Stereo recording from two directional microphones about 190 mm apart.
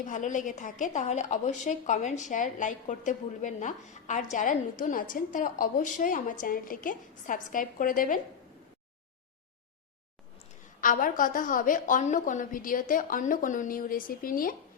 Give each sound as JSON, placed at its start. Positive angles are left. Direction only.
{"t": 0.0, "sound": "a woman's voice", "side_deg": 40}
{"t": 10.8, "sound": "a woman's voice", "side_deg": 45}